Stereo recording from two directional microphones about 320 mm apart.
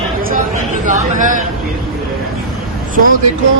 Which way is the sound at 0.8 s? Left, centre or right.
Right.